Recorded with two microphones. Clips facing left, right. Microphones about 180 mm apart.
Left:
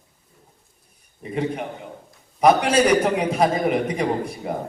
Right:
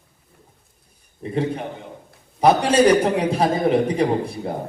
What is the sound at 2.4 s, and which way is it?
A man's voice, 30° right (ahead or behind).